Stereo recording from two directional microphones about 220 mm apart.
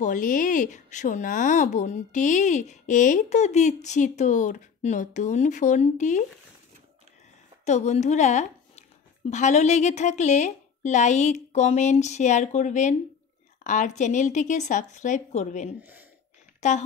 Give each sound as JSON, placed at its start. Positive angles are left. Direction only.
{"t": 0.0, "sound": "speech", "side_deg": 35}
{"t": 7.6, "sound": "a woman's voice", "side_deg": 30}
{"t": 15.8, "sound": "speech", "side_deg": -10}
{"t": 16.6, "sound": "speech", "side_deg": 30}